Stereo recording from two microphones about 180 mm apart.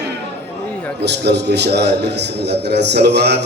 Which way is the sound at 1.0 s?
70° right (ahead or behind).